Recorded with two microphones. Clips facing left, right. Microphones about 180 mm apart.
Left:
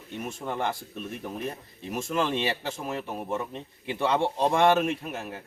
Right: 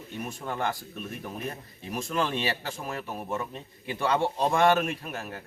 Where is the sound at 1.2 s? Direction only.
25° left (ahead or behind).